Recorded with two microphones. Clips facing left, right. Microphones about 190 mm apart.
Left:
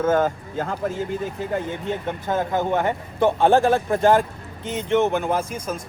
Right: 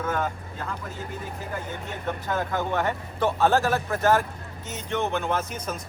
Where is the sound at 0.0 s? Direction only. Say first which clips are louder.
Left 8 dB; 40° left (ahead or behind).